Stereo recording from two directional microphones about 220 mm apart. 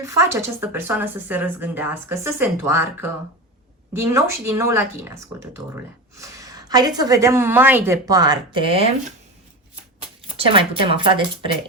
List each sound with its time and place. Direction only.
0.0 s speech: 15° right (ahead or behind)
10.2 s speech: 25° right (ahead or behind)